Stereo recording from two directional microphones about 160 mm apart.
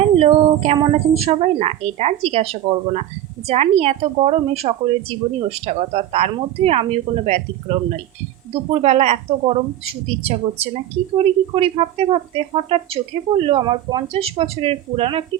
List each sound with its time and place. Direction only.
0.0 s speech: 40° right (ahead or behind)